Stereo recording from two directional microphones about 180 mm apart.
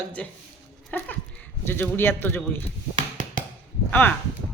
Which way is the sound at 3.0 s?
45° right (ahead or behind).